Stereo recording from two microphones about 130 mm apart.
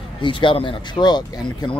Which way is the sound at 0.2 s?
40° left (ahead or behind).